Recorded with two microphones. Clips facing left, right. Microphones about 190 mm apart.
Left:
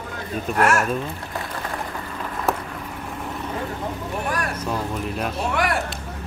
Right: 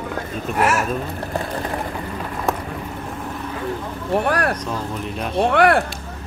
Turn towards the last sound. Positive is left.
turn(degrees=-60)  # may be behind; listen again after turning